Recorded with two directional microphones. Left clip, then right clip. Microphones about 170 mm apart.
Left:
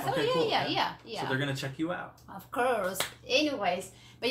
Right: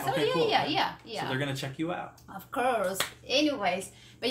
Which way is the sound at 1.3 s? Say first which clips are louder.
Left 2 dB; 20° right (ahead or behind).